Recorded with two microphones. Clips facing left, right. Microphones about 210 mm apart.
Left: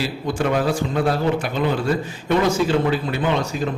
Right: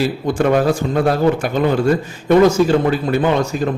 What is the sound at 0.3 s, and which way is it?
A man's voice, 45° right (ahead or behind).